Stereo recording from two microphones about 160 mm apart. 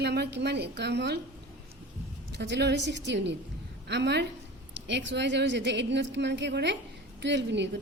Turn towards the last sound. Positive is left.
turn(degrees=-90)